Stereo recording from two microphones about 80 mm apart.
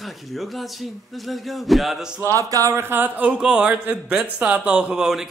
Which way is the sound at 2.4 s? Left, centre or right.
Right.